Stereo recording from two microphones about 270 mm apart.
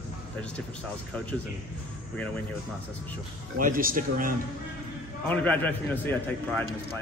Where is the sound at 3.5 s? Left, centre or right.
Right.